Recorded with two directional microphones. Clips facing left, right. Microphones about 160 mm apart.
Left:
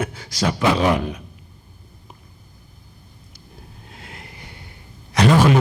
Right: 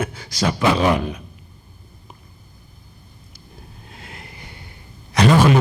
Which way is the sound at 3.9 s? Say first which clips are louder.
Right 1 dB; 40° right (ahead or behind).